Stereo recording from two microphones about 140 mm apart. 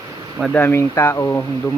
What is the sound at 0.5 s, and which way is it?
Speech, 15° left (ahead or behind).